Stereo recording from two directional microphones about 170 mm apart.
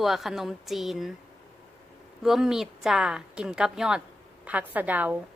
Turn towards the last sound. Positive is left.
turn(degrees=-10)  # may be behind; listen again after turning